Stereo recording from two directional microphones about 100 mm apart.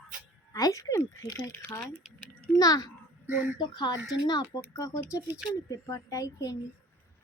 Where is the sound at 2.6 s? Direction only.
40° left (ahead or behind).